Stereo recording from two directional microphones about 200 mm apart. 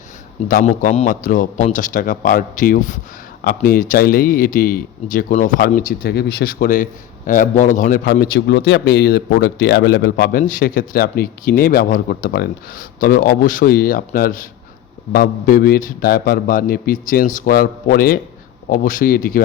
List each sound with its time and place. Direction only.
0.4 s a man's voice: 45° left (ahead or behind)